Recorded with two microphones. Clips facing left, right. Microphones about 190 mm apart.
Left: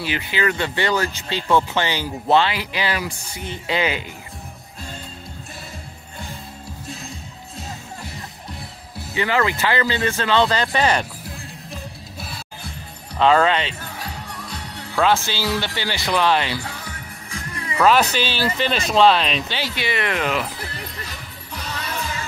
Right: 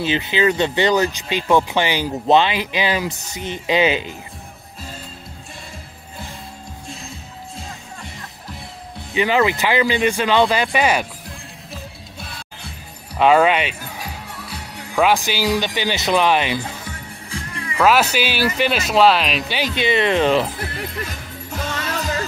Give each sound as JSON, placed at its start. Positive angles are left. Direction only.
{"t": 0.0, "sound": "speech", "side_deg": -20}
{"t": 9.1, "sound": "speech", "side_deg": -15}
{"t": 11.2, "sound": "music", "side_deg": 5}
{"t": 13.2, "sound": "music", "side_deg": -15}
{"t": 17.7, "sound": "speech", "side_deg": -10}
{"t": 19.6, "sound": "speech", "side_deg": -20}
{"t": 21.0, "sound": "music", "side_deg": -45}